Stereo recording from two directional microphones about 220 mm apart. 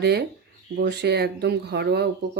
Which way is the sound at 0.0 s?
50° right (ahead or behind).